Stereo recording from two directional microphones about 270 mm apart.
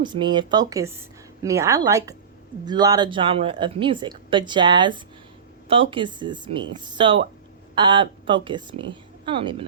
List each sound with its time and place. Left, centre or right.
0.0 s speech: centre